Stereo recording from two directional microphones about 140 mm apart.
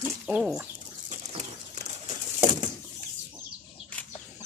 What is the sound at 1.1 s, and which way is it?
Bird, 55° right (ahead or behind).